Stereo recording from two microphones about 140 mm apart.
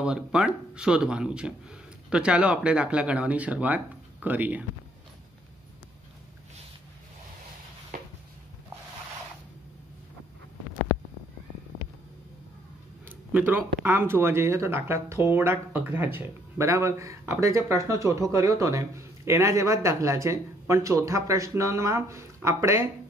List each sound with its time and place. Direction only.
0.0 s speech: 5° right (ahead or behind)
7.9 s a sound: 75° right (ahead or behind)
13.0 s speech: 10° right (ahead or behind)